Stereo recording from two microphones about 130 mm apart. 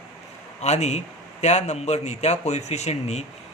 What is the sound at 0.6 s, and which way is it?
Speech, 60° left (ahead or behind).